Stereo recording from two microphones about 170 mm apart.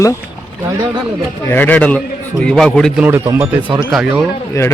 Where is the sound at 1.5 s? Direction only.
10° left (ahead or behind).